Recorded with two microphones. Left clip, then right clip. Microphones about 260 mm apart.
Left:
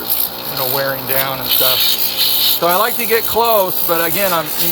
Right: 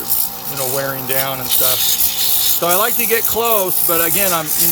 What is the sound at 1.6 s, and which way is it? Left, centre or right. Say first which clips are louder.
Rub: left 5 dB; right.